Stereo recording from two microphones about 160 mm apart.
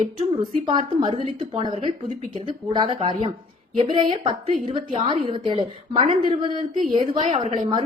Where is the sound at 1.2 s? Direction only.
45° right (ahead or behind).